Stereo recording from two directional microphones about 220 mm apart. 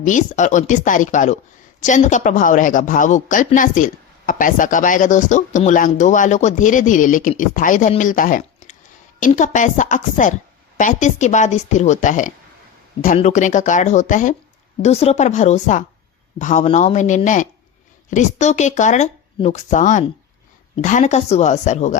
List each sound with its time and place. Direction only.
0.0 s speech: 35° left (ahead or behind)